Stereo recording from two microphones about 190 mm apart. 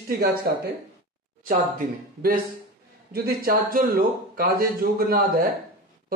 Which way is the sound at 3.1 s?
50° right (ahead or behind).